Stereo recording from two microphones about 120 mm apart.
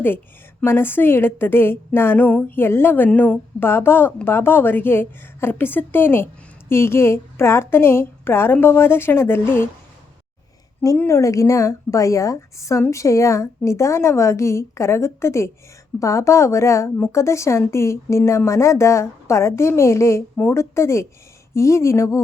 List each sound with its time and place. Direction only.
0.6 s a woman's voice: 20° left (ahead or behind)
10.9 s a woman's voice: 20° left (ahead or behind)
20.3 s a woman's voice: 10° left (ahead or behind)
20.6 s a woman's voice: 20° left (ahead or behind)